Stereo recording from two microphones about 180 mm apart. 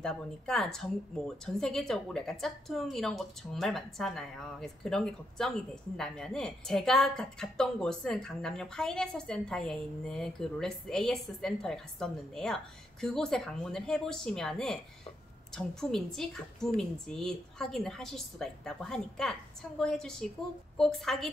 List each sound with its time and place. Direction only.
0.0 s a woman's voice: 5° left (ahead or behind)